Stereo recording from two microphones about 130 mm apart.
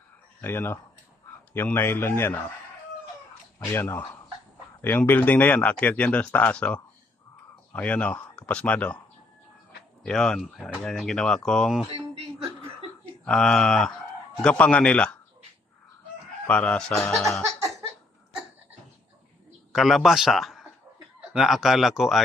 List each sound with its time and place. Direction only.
0.4 s speech: 15° left (ahead or behind)
3.7 s speech: 15° left (ahead or behind)
10.0 s speech: 5° left (ahead or behind)
13.2 s speech: 5° left (ahead or behind)
16.5 s speech: 10° left (ahead or behind)
19.7 s speech: centre (ahead or behind)